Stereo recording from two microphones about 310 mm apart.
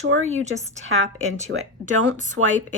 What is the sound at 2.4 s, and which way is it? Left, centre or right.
Speech, right.